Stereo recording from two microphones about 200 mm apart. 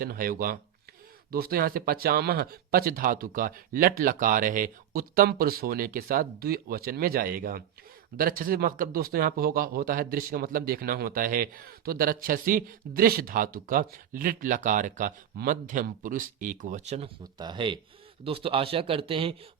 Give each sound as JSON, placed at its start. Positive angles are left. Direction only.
{"t": 0.0, "sound": "speech", "side_deg": -45}
{"t": 17.3, "sound": "speech", "side_deg": -20}